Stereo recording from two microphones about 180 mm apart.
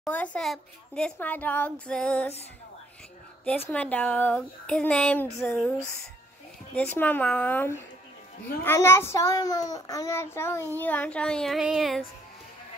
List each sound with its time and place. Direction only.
0.0 s a child's voice: 10° left (ahead or behind)
3.4 s a child's voice: 10° left (ahead or behind)
6.7 s a child's voice: 5° left (ahead or behind)